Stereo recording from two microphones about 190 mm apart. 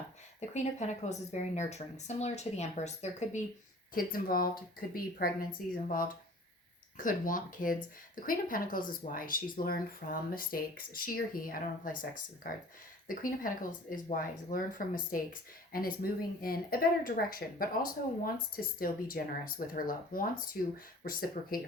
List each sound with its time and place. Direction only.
0.3 s speech: 35° left (ahead or behind)
3.9 s speech: 50° left (ahead or behind)